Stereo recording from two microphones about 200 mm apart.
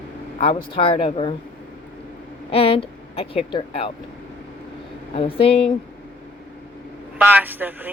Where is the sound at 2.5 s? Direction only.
30° left (ahead or behind).